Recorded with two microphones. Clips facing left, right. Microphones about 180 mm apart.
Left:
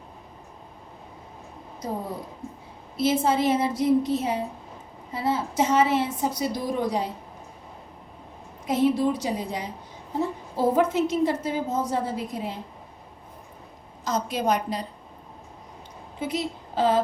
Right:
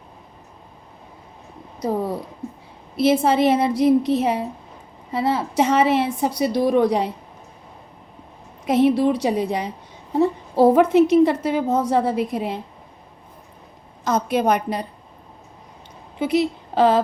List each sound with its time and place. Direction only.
2.9 s a woman's voice: 70° right (ahead or behind)
8.6 s a woman's voice: 70° right (ahead or behind)
14.0 s a woman's voice: 60° right (ahead or behind)
16.2 s a woman's voice: 70° right (ahead or behind)